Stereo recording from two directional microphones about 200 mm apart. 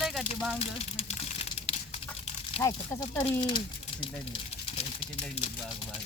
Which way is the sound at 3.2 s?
25° left (ahead or behind).